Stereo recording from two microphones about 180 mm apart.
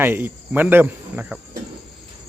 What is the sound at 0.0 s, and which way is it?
Speech, 10° right (ahead or behind).